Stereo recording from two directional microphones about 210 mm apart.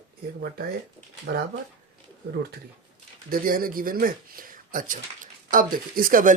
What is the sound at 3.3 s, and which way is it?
Speech, 45° right (ahead or behind).